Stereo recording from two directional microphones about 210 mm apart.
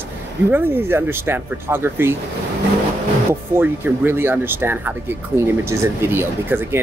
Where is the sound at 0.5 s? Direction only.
10° right (ahead or behind).